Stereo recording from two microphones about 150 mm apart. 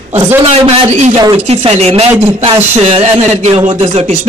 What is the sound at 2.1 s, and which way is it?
Speech, 15° right (ahead or behind).